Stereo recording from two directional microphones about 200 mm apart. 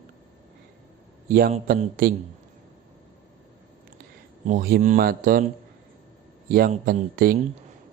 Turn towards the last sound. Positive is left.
turn(degrees=-45)  # may be behind; listen again after turning